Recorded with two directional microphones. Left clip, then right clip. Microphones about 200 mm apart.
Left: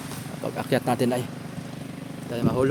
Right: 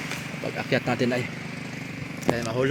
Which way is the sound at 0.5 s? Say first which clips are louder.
Left 1 dB; 15° left (ahead or behind).